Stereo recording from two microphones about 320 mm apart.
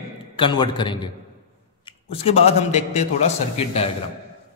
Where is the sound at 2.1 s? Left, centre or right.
Centre.